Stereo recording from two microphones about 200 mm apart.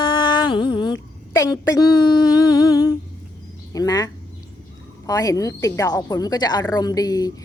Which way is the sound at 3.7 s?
20° left (ahead or behind).